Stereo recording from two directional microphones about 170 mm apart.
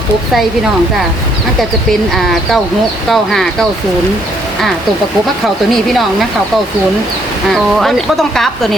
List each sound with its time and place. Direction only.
3.1 s speech: centre (ahead or behind)
7.5 s speech: centre (ahead or behind)